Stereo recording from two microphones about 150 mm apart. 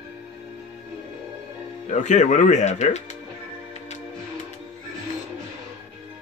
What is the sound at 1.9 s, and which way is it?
Speech, 55° left (ahead or behind).